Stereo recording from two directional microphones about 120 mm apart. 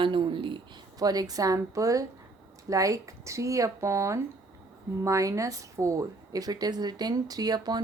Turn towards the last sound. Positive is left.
turn(degrees=-35)  # may be behind; listen again after turning